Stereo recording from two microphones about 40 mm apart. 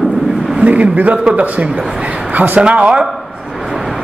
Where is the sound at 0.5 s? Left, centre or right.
Right.